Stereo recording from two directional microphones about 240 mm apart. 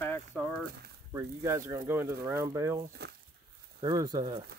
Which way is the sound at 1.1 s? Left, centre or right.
Centre.